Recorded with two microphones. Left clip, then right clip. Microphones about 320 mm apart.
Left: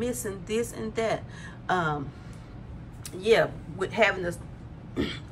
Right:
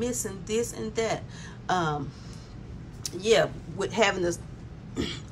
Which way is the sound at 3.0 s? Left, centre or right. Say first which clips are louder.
Even; centre.